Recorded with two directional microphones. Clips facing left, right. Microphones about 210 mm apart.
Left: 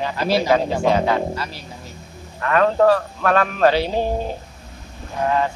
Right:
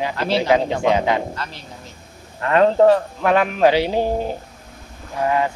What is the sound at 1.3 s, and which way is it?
Speech, 10° left (ahead or behind).